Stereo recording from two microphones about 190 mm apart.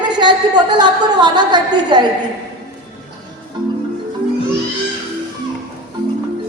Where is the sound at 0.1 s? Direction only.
25° right (ahead or behind).